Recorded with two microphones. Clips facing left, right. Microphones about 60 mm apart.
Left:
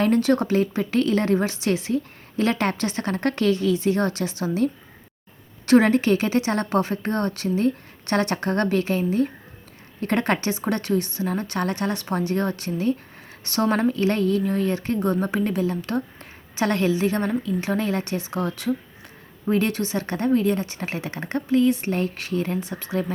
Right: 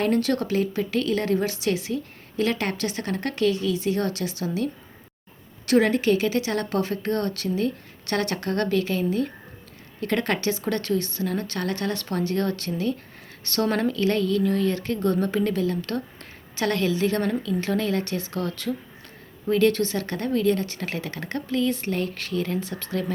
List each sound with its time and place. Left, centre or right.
0.0 s a woman's voice: left